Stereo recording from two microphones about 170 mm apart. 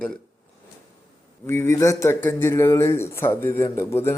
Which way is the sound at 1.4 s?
15° left (ahead or behind).